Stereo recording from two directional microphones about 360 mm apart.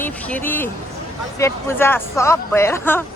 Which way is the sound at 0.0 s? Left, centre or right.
Centre.